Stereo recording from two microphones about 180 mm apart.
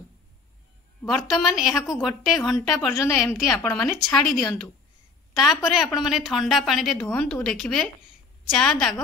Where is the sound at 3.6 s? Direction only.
10° left (ahead or behind).